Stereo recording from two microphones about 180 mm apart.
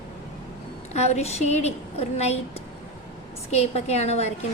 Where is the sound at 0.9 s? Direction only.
35° left (ahead or behind).